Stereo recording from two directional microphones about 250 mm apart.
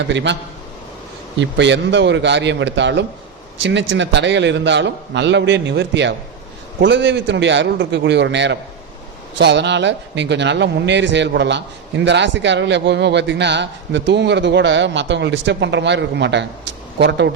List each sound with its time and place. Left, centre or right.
0.1 s speech: right
1.4 s speech: right